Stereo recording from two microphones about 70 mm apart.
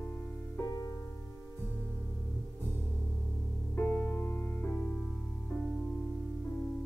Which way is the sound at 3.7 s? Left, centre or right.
Left.